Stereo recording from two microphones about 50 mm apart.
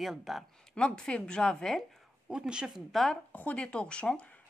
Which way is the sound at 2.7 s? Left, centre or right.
Centre.